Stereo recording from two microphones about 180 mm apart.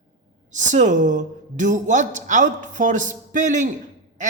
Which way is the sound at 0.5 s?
45° right (ahead or behind).